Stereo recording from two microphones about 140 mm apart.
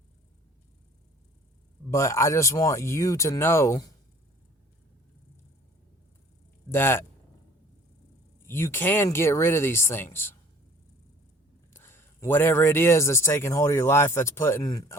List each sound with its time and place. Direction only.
1.9 s speech: 20° left (ahead or behind)
6.7 s speech: 15° left (ahead or behind)
8.4 s speech: 15° left (ahead or behind)
11.7 s speech: 15° left (ahead or behind)